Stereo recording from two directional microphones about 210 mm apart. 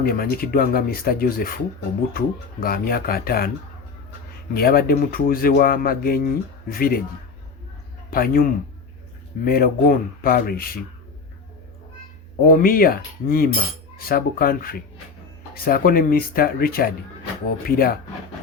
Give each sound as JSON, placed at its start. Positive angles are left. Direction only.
{"t": 0.0, "sound": "speech", "side_deg": 45}
{"t": 4.5, "sound": "speech", "side_deg": 45}
{"t": 8.1, "sound": "speech", "side_deg": 45}
{"t": 12.5, "sound": "speech", "side_deg": 45}